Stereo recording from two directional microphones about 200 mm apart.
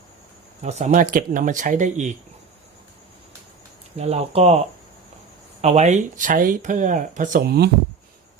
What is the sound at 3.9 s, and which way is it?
Speech, 30° right (ahead or behind).